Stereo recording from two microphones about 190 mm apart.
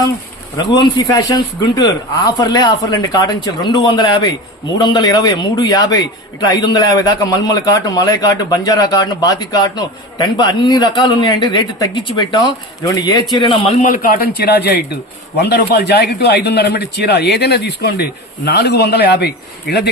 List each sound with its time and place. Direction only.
0.5 s a man's voice: 20° left (ahead or behind)
13.8 s a man's voice: 45° left (ahead or behind)